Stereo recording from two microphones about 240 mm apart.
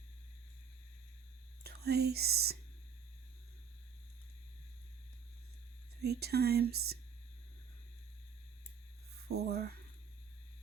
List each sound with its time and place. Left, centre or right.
1.6 s speech: right
6.0 s speech: right
9.3 s speech: right